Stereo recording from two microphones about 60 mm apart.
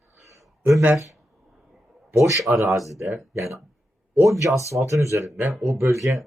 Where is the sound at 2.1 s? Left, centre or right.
Right.